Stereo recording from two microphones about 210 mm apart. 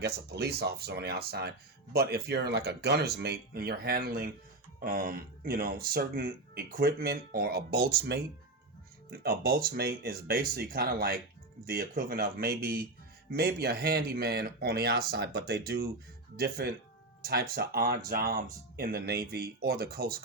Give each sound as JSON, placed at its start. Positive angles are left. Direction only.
{"t": 0.0, "sound": "speech", "side_deg": -50}